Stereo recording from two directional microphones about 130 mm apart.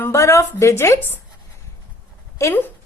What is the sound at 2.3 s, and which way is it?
Speech, 20° left (ahead or behind).